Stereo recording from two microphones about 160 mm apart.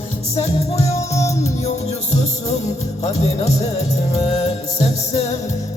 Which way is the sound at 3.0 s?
45° left (ahead or behind).